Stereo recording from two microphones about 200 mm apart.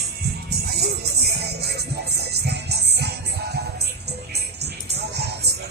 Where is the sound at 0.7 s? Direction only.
55° right (ahead or behind).